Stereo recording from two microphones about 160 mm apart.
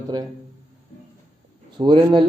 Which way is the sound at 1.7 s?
30° right (ahead or behind).